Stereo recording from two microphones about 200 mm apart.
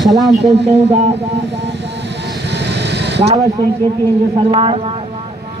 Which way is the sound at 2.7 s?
55° right (ahead or behind).